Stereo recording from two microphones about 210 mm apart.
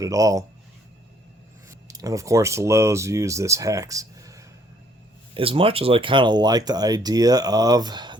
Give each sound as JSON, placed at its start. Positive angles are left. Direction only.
{"t": 0.0, "sound": "speech", "side_deg": -15}
{"t": 1.9, "sound": "speech", "side_deg": -15}
{"t": 5.3, "sound": "speech", "side_deg": -25}